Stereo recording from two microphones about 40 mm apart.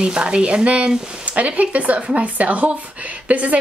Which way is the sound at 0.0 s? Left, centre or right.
Right.